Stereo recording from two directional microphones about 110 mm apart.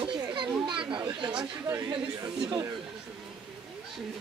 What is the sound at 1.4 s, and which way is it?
Speech, 35° right (ahead or behind).